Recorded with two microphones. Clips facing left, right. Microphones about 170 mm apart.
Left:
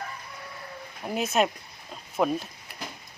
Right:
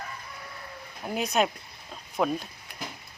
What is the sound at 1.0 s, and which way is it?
Speech, centre (ahead or behind).